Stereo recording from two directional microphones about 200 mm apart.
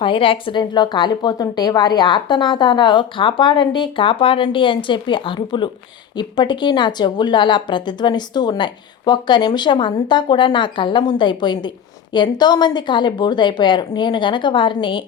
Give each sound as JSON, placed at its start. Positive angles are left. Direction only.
{"t": 0.0, "sound": "speech", "side_deg": 25}